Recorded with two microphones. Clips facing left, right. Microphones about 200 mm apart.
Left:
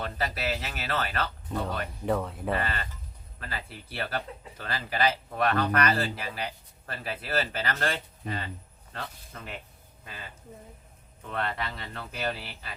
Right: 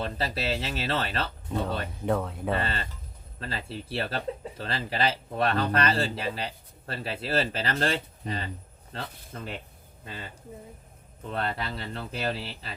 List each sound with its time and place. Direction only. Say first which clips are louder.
0.0 s speech: right 1 dB; 30° right (ahead or behind)
2.0 s speech: right 1 dB; centre (ahead or behind)
2.6 s speech: right 1 dB; 25° right (ahead or behind)
11.3 s speech: right 1 dB; 30° right (ahead or behind)